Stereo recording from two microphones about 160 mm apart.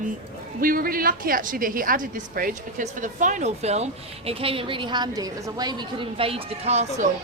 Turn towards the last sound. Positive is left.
turn(degrees=-45)  # may be behind; listen again after turning